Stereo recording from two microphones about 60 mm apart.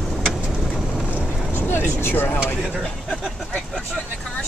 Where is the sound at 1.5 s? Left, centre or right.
Left.